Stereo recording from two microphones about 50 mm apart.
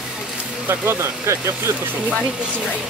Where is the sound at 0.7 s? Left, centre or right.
Right.